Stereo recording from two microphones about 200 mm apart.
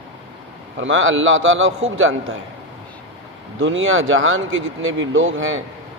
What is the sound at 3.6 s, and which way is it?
Speech, 75° right (ahead or behind).